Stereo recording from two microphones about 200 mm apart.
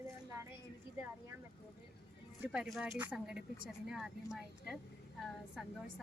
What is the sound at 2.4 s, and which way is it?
Speech, 5° right (ahead or behind).